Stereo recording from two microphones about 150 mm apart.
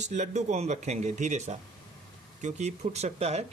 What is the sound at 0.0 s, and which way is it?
Speech, 50° right (ahead or behind).